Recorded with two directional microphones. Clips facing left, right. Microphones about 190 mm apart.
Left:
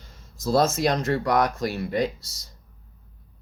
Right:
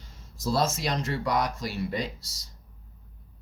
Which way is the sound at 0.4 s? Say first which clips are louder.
Left 6 dB; 45° left (ahead or behind).